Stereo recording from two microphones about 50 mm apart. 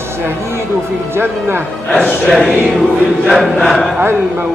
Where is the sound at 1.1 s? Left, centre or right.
Right.